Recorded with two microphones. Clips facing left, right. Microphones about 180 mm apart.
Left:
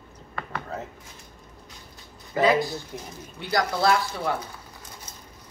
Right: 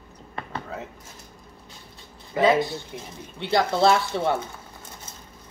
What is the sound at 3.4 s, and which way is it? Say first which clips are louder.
Speech: right 4 dB; 25° right (ahead or behind).